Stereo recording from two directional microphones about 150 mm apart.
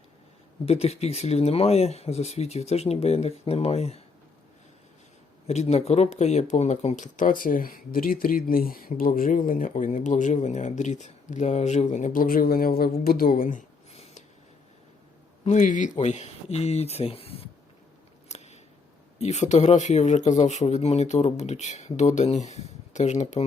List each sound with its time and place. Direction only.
0.6 s speech: 45° left (ahead or behind)
5.5 s speech: 45° left (ahead or behind)
15.4 s speech: 55° left (ahead or behind)
18.3 s scissors: 50° left (ahead or behind)
19.2 s speech: 50° left (ahead or behind)